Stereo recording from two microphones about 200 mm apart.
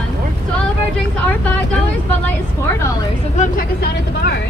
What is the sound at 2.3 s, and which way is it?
Vehicle, 10° left (ahead or behind).